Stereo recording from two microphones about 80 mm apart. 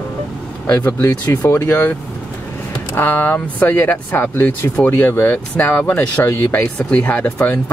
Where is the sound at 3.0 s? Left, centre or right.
Left.